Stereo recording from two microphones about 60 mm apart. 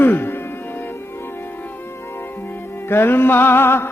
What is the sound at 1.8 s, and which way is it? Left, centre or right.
Music, left.